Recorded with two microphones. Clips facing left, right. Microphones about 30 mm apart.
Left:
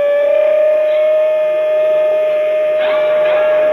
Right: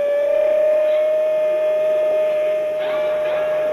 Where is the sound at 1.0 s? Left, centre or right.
Left.